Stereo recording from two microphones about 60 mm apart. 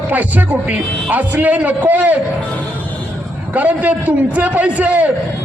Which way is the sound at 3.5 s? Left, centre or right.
Right.